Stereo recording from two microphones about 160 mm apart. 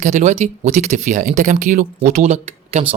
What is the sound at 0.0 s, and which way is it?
Speech, 50° right (ahead or behind).